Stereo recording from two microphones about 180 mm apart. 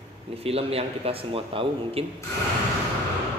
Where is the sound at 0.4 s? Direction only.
35° right (ahead or behind).